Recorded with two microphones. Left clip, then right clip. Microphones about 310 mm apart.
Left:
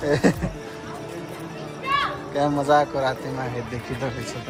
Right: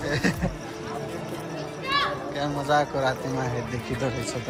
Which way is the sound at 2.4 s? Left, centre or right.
Centre.